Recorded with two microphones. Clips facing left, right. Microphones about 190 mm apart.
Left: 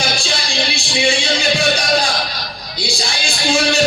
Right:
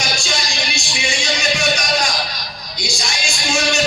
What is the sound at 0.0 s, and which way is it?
Music, 30° left (ahead or behind).